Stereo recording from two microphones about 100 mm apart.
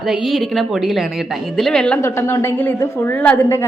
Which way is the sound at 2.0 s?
25° left (ahead or behind).